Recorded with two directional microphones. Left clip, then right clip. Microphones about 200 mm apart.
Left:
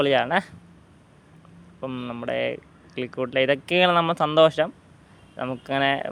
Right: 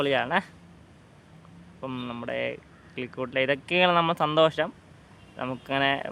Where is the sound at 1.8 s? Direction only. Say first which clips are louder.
Left 3 dB; 10° left (ahead or behind).